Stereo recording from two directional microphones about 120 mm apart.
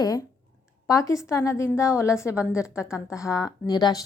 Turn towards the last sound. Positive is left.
turn(degrees=35)  # may be behind; listen again after turning